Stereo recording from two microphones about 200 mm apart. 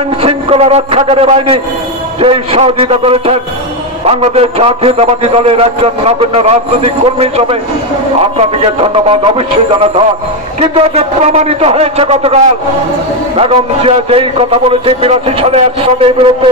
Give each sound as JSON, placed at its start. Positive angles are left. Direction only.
{"t": 0.2, "sound": "a man's voice", "side_deg": -30}
{"t": 13.4, "sound": "a man's voice", "side_deg": -30}